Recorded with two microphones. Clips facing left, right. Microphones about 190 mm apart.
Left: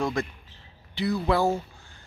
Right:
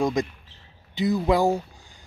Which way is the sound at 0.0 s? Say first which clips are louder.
Right 4 dB; 15° right (ahead or behind).